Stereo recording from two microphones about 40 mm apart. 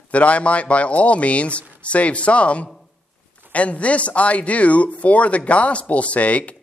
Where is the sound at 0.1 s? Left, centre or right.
Left.